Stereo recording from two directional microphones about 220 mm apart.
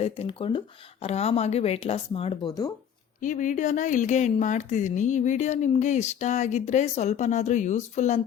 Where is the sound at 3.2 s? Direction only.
35° left (ahead or behind).